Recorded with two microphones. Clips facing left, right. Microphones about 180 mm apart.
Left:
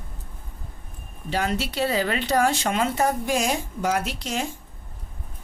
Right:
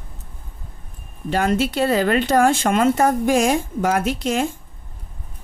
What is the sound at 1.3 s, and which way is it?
Speech, 50° right (ahead or behind).